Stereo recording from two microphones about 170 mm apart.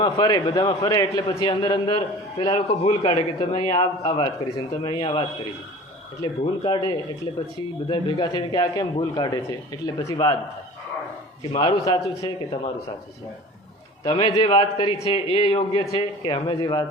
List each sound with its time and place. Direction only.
0.0 s a man's voice: 25° left (ahead or behind)
6.4 s a man's voice: 30° left (ahead or behind)
11.5 s a man's voice: 25° left (ahead or behind)
14.0 s a man's voice: 30° left (ahead or behind)